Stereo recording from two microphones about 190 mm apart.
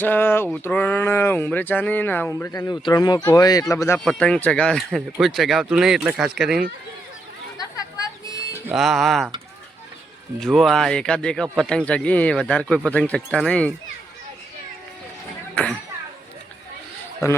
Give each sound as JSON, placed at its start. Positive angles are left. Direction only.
{"t": 0.0, "sound": "speech", "side_deg": 10}
{"t": 4.0, "sound": "speech", "side_deg": 5}
{"t": 8.3, "sound": "music", "side_deg": 20}
{"t": 8.7, "sound": "speech", "side_deg": 0}
{"t": 10.4, "sound": "speech", "side_deg": 0}